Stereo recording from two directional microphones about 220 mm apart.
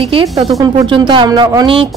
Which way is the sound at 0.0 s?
25° right (ahead or behind).